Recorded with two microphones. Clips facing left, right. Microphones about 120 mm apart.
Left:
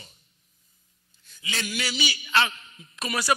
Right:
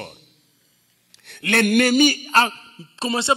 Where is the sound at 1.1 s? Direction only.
70° right (ahead or behind); by 3.3 s 25° right (ahead or behind).